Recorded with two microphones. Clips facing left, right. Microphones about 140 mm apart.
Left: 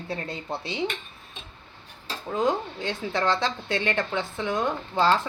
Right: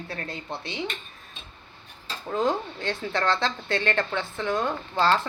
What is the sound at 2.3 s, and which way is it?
Speech, 15° left (ahead or behind).